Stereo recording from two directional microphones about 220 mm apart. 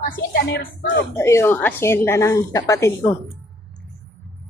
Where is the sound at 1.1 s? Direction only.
10° left (ahead or behind).